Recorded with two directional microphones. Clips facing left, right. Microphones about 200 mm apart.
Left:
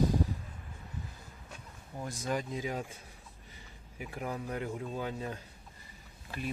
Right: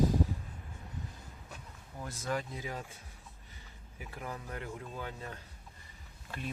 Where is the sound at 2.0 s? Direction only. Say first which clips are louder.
Left 2 dB; 15° left (ahead or behind).